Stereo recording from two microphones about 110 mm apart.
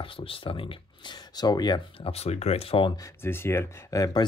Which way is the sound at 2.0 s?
70° left (ahead or behind).